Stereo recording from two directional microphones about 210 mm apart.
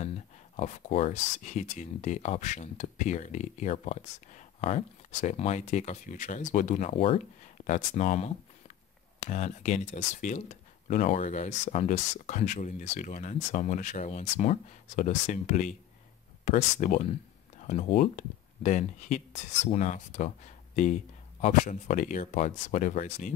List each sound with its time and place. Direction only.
0.6 s speech: 35° left (ahead or behind)